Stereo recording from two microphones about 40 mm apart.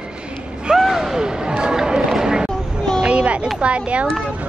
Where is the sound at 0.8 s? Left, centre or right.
Centre.